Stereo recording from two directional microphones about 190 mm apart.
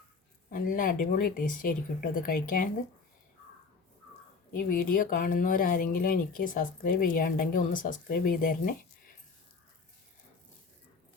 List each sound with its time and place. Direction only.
0.5 s speech: 45° left (ahead or behind)
4.5 s speech: 50° left (ahead or behind)